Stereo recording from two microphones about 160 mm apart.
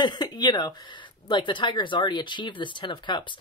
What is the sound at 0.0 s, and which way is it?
Speech, 25° left (ahead or behind).